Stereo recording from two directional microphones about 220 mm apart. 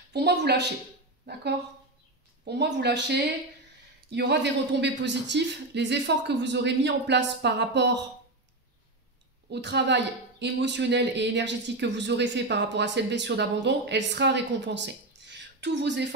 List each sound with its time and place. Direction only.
0.1 s speech: 50° right (ahead or behind)
2.4 s speech: 50° right (ahead or behind)
9.5 s speech: 50° right (ahead or behind)